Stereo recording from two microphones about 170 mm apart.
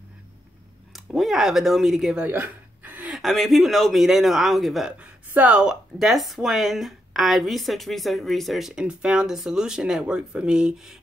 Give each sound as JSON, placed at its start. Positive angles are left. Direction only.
{"t": 0.9, "sound": "speech", "side_deg": 0}